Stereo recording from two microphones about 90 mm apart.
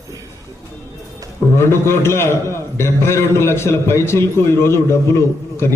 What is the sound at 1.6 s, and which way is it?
A man's voice, 30° left (ahead or behind).